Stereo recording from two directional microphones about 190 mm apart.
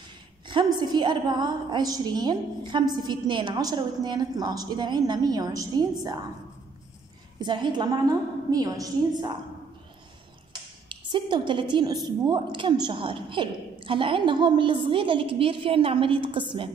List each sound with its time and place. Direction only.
0.5 s a woman's voice: 25° right (ahead or behind)
7.3 s a woman's voice: 25° right (ahead or behind)
10.9 s a woman's voice: 25° right (ahead or behind)